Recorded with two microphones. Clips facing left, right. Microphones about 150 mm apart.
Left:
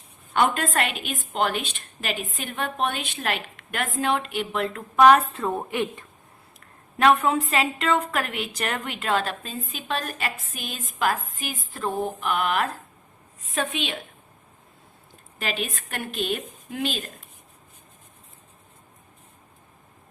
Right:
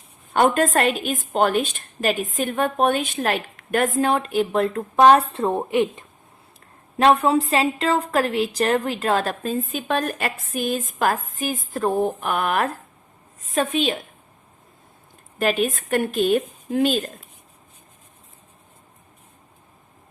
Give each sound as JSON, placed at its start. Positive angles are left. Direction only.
{"t": 0.3, "sound": "a woman's voice", "side_deg": -45}
{"t": 7.0, "sound": "a woman's voice", "side_deg": -30}
{"t": 15.4, "sound": "a woman's voice", "side_deg": -45}